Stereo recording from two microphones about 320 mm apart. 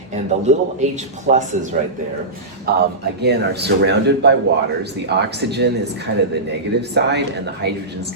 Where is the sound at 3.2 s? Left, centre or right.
Right.